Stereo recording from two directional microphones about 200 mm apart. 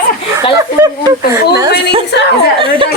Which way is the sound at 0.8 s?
15° right (ahead or behind).